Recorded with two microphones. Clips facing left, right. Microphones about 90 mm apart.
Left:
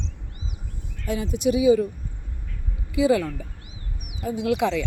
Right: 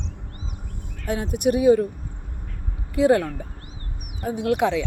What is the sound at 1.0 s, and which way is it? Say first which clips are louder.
Speech: right 1 dB; 60° right (ahead or behind).